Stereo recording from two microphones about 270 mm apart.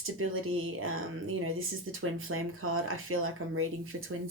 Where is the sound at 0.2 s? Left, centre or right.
Right.